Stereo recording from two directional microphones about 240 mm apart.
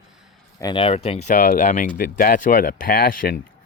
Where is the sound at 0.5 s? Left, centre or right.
Centre; by 3.3 s left.